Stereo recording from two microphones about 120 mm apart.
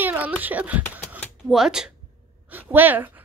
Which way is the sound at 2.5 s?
15° right (ahead or behind).